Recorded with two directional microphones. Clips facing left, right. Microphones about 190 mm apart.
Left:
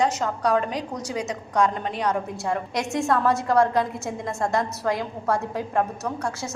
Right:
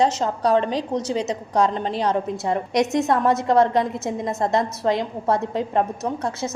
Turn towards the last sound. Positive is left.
turn(degrees=-20)  # may be behind; listen again after turning